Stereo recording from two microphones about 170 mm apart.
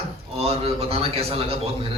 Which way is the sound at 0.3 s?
35° right (ahead or behind).